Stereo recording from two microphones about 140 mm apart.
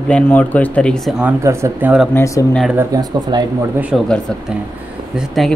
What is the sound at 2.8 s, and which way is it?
Speech, 25° right (ahead or behind).